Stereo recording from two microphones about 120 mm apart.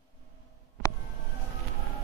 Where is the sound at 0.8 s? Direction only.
25° left (ahead or behind).